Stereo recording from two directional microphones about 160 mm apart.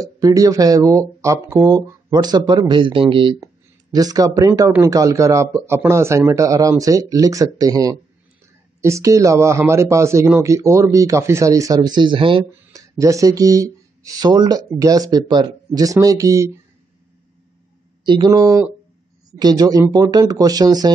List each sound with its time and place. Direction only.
0.0 s speech: 20° right (ahead or behind)
12.7 s speech: 20° right (ahead or behind)
18.0 s speech: 30° right (ahead or behind)